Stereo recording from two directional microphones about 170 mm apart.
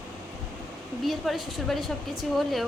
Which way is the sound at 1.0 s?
Centre (ahead or behind).